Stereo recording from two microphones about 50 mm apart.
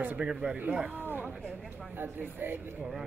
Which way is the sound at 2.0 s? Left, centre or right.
Right.